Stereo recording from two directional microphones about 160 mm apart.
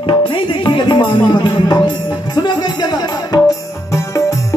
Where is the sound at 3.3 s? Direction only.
25° left (ahead or behind).